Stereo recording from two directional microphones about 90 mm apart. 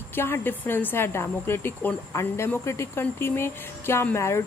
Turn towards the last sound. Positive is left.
turn(degrees=30)  # may be behind; listen again after turning